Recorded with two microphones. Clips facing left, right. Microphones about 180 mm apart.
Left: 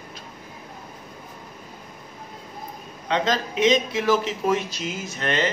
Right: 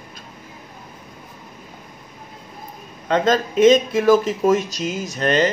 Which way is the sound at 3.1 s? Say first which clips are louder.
Right 6 dB; 50° right (ahead or behind).